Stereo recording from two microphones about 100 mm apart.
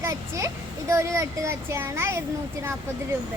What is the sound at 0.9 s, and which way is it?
Speech, 30° right (ahead or behind).